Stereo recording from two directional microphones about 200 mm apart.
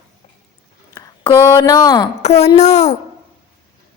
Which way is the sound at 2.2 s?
30° left (ahead or behind).